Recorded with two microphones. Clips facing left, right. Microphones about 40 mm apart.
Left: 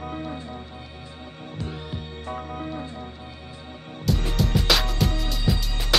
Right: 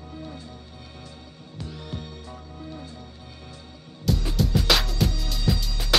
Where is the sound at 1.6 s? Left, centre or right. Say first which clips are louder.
Left 2 dB; left.